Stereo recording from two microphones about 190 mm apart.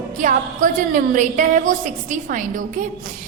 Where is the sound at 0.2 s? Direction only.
45° right (ahead or behind).